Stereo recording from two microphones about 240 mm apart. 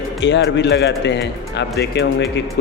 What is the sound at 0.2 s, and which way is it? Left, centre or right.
Speech, left.